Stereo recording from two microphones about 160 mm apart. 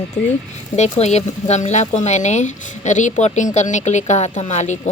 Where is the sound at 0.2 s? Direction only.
5° left (ahead or behind).